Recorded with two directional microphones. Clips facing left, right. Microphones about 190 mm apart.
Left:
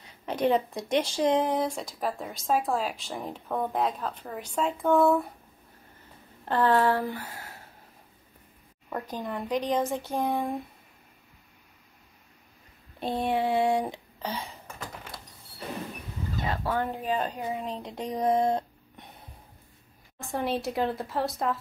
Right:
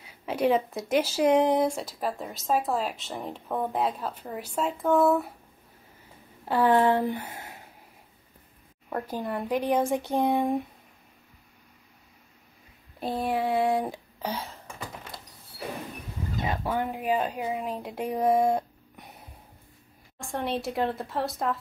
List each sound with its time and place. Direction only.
0.0 s speech: 5° right (ahead or behind)
6.4 s speech: 10° right (ahead or behind)
8.9 s speech: 5° right (ahead or behind)
13.0 s speech: centre (ahead or behind)
16.3 s speech: 15° right (ahead or behind)
17.2 s speech: centre (ahead or behind)
20.2 s speech: centre (ahead or behind)